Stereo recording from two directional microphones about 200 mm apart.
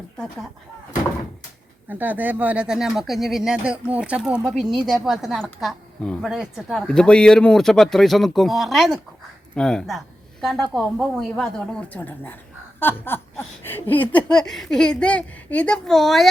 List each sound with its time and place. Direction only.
1.9 s a woman's voice: 10° right (ahead or behind)